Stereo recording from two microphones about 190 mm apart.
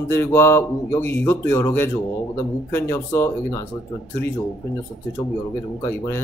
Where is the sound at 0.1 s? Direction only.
10° left (ahead or behind).